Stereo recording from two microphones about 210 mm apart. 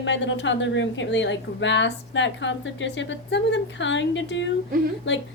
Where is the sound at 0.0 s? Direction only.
60° left (ahead or behind).